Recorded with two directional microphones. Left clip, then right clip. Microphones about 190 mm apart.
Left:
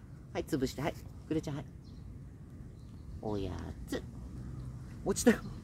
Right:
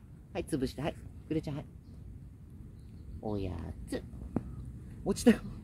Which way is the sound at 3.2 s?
20° right (ahead or behind).